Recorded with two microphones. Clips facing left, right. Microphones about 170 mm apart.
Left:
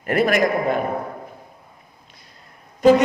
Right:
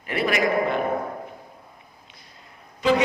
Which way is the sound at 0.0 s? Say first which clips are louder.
Left 5 dB; 50° left (ahead or behind).